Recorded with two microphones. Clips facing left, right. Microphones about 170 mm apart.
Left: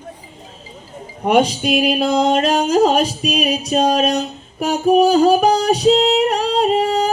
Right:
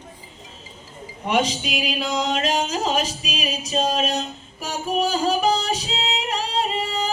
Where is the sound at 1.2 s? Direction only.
55° left (ahead or behind).